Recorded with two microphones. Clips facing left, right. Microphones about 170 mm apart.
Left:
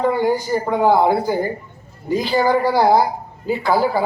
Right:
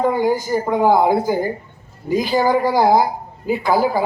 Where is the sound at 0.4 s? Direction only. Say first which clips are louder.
Even; 15° right (ahead or behind).